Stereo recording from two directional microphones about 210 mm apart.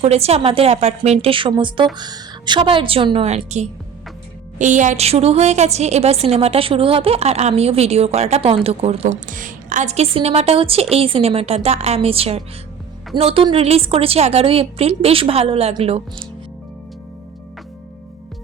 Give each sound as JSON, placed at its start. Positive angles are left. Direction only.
{"t": 0.0, "sound": "a woman's voice", "side_deg": -30}